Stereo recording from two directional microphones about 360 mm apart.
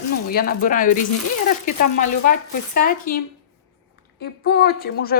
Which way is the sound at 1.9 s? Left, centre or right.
Left.